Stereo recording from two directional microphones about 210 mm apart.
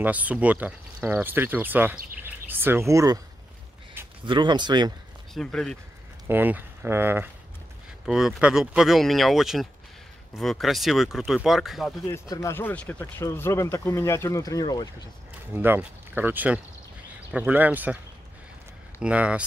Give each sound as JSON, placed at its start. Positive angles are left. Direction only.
{"t": 0.0, "sound": "speech", "side_deg": -5}
{"t": 4.2, "sound": "speech", "side_deg": -20}
{"t": 5.3, "sound": "speech", "side_deg": 5}
{"t": 6.2, "sound": "speech", "side_deg": -10}
{"t": 12.1, "sound": "speech", "side_deg": 15}
{"t": 15.5, "sound": "speech", "side_deg": -10}
{"t": 18.9, "sound": "speech", "side_deg": -5}